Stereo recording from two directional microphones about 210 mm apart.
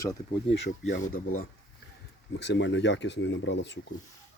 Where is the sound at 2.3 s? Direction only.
55° left (ahead or behind).